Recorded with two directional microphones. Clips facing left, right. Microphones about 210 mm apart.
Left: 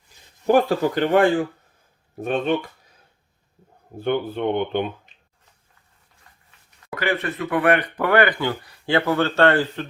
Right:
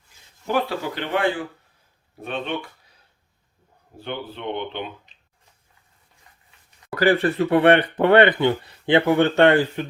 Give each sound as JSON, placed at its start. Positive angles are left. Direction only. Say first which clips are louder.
{"t": 0.4, "sound": "speech", "louder": "left 7 dB", "side_deg": 45}
{"t": 3.9, "sound": "speech", "louder": "left 9 dB", "side_deg": 50}
{"t": 6.9, "sound": "speech", "louder": "right 6 dB", "side_deg": -35}